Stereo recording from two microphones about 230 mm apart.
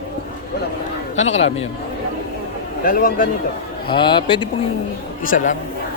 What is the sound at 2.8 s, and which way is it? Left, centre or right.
Speech, left.